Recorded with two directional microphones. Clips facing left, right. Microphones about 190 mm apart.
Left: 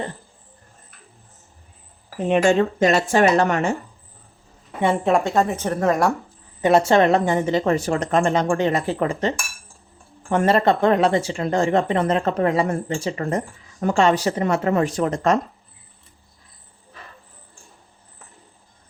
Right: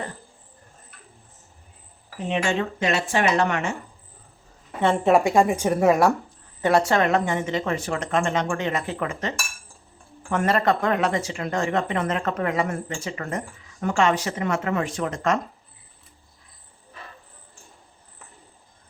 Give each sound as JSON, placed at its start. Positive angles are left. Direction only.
{"t": 2.2, "sound": "speech", "side_deg": 45}
{"t": 5.0, "sound": "speech", "side_deg": -10}
{"t": 6.6, "sound": "speech", "side_deg": 20}